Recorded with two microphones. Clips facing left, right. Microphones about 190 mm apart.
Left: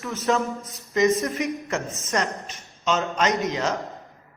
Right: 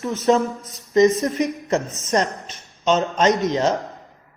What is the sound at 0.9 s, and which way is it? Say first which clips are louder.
A man's voice: right 5 dB; 35° right (ahead or behind).